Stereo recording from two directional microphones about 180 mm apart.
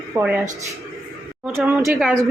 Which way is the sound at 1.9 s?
5° right (ahead or behind).